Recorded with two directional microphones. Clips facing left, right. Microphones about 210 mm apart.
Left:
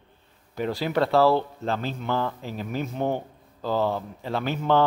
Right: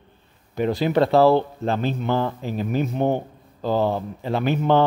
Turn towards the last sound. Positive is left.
turn(degrees=-20)  # may be behind; listen again after turning